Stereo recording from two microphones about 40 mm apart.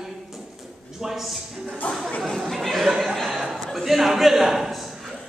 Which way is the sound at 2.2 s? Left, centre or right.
Centre.